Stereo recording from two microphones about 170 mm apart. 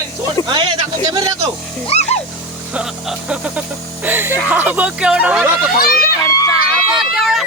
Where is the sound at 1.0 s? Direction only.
20° right (ahead or behind).